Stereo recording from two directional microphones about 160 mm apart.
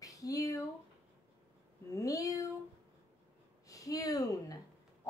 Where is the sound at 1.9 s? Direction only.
20° left (ahead or behind).